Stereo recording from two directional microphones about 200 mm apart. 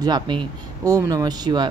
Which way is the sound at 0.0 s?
20° right (ahead or behind).